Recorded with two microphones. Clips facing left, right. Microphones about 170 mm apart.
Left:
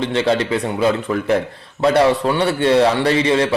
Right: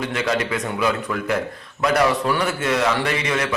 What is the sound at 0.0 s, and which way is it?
A man's voice, 30° left (ahead or behind).